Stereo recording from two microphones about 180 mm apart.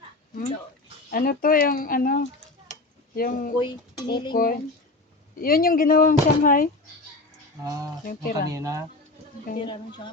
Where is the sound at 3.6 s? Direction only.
25° left (ahead or behind).